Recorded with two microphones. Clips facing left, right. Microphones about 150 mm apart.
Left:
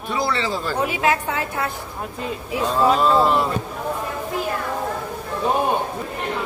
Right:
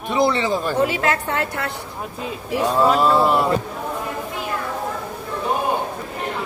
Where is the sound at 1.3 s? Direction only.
75° right (ahead or behind).